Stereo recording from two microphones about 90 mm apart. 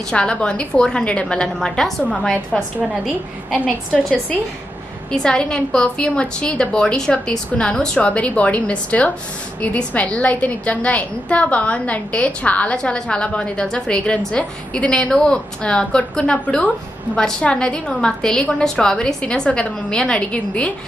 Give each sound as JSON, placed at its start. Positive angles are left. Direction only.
{"t": 0.1, "sound": "a woman's voice", "side_deg": 10}
{"t": 3.9, "sound": "a woman's voice", "side_deg": 15}